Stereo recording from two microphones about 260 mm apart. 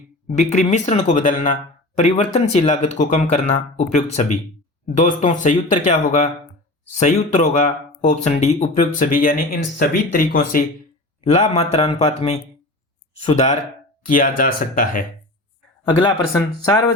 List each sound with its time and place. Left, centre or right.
0.3 s speech: left
15.8 s speech: centre